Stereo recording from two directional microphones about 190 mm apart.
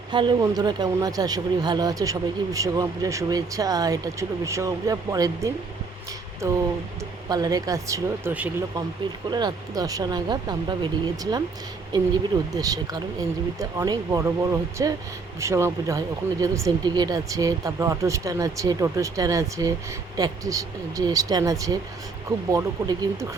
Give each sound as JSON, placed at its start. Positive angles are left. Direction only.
{"t": 0.1, "sound": "speech", "side_deg": -25}
{"t": 9.3, "sound": "speech", "side_deg": -20}
{"t": 12.5, "sound": "speech", "side_deg": -20}